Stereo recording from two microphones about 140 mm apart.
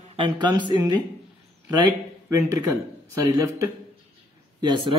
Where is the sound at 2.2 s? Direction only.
20° right (ahead or behind).